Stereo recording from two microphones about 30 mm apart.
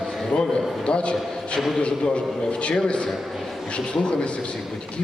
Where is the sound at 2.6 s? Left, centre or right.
Left.